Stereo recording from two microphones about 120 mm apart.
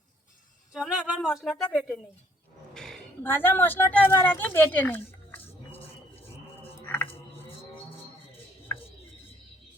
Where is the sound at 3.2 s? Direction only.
20° left (ahead or behind).